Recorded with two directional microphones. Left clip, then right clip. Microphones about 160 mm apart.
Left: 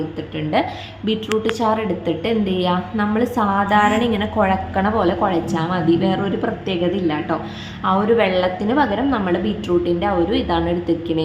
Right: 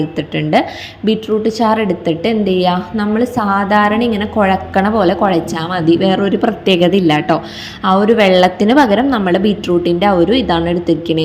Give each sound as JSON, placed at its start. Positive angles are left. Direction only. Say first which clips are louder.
{"t": 0.2, "sound": "a woman's voice", "louder": "right 7 dB", "side_deg": -35}
{"t": 1.0, "sound": "a woman's voice", "louder": "right 5 dB", "side_deg": -25}